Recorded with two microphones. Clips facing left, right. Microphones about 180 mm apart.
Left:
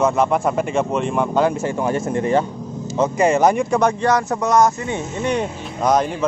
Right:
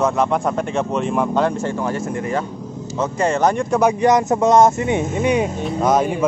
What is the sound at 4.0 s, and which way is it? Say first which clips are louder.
Speech: right 4 dB; 20° right (ahead or behind).